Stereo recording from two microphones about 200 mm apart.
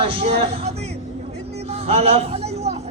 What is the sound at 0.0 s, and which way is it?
Speech, 30° right (ahead or behind).